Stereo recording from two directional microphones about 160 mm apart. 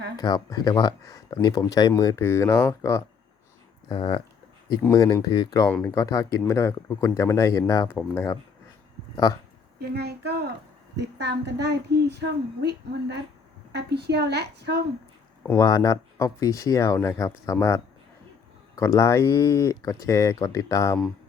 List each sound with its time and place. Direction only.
0.2 s speech: 25° left (ahead or behind)
3.8 s speech: 30° left (ahead or behind)
9.8 s a woman's voice: 90° right
15.4 s speech: 20° left (ahead or behind)
18.8 s speech: 20° left (ahead or behind)